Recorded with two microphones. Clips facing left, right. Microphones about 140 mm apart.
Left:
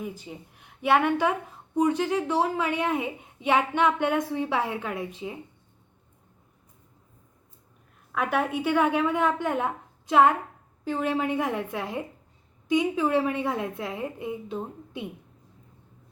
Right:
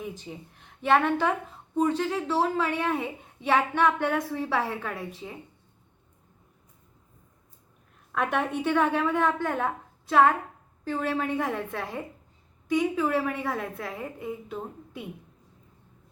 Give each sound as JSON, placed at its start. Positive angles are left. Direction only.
{"t": 0.0, "sound": "a woman's voice", "side_deg": 5}
{"t": 8.1, "sound": "a woman's voice", "side_deg": 5}